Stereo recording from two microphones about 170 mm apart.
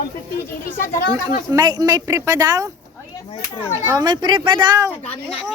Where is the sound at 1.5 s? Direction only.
20° right (ahead or behind).